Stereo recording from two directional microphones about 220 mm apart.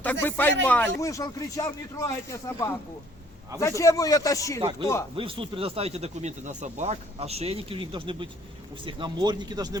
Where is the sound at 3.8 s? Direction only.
15° left (ahead or behind).